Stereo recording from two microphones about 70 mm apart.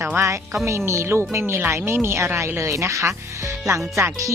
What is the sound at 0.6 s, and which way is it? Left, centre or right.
A woman's voice, right.